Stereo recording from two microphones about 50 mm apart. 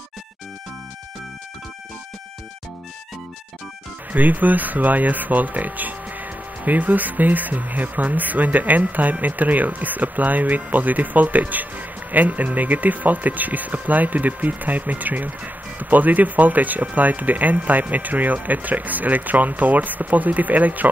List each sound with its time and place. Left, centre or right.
4.1 s speech: right